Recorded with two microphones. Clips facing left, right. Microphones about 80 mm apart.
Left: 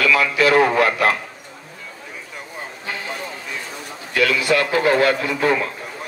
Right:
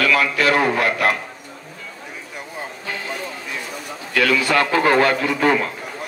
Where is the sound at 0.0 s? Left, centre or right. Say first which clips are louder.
Left 1 dB; right.